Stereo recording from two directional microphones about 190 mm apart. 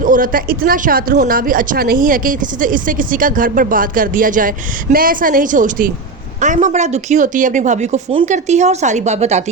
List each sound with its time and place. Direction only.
0.0 s speech: 45° right (ahead or behind)